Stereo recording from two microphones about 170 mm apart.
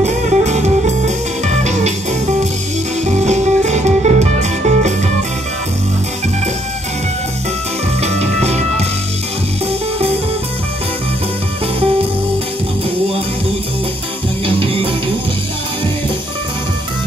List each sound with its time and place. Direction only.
0.0 s music: 40° right (ahead or behind)
3.3 s music: 40° right (ahead or behind)
8.0 s music: 40° right (ahead or behind)
14.4 s music: 30° right (ahead or behind)